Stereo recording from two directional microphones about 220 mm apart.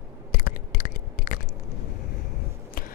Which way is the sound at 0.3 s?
40° left (ahead or behind).